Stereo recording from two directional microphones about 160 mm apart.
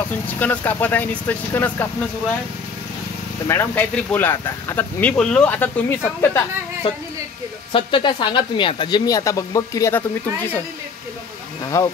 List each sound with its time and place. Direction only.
0.1 s speech: 10° left (ahead or behind)
3.4 s speech: 10° left (ahead or behind)
7.7 s speech: 30° left (ahead or behind); by 10.6 s 10° left (ahead or behind)
11.6 s speech: 20° left (ahead or behind)